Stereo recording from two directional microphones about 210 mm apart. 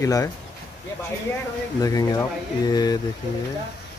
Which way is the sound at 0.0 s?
15° left (ahead or behind).